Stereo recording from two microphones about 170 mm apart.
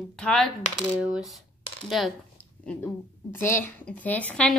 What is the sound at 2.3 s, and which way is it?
A woman's voice, 10° left (ahead or behind).